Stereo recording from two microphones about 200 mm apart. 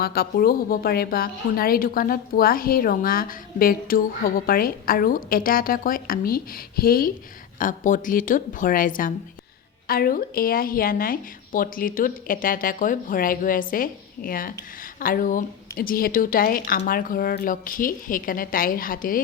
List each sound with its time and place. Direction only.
0.0 s speech: 50° left (ahead or behind)